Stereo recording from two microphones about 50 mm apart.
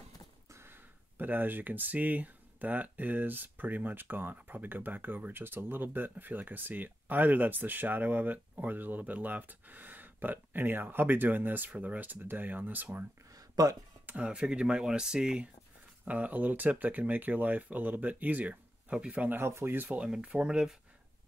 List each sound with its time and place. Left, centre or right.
0.7 s speech: right
14.0 s a sound: right
14.3 s speech: centre
16.1 s speech: right
19.3 s speech: right
19.9 s speech: centre